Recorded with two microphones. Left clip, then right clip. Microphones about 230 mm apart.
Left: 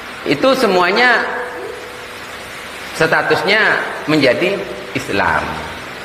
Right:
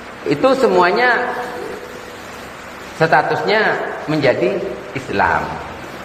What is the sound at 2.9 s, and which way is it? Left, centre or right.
Speech, left.